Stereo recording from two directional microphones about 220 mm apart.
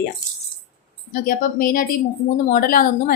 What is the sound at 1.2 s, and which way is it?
A woman's voice, 40° left (ahead or behind).